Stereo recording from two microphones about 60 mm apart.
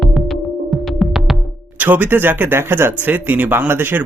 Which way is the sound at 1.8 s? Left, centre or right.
Right.